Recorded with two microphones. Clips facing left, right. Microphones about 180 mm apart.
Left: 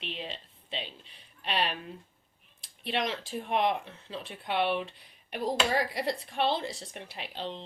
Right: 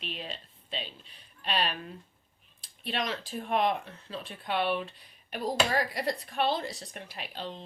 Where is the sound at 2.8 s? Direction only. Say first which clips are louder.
Left 1 dB; 20° left (ahead or behind).